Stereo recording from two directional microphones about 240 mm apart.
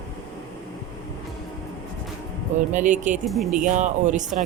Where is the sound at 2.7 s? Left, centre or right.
Right.